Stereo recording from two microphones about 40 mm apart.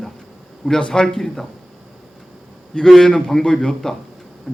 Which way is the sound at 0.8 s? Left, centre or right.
Left.